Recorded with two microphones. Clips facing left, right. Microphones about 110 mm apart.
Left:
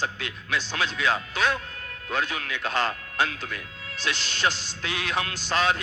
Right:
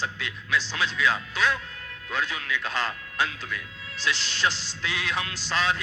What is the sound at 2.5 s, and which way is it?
A man's voice, 55° left (ahead or behind).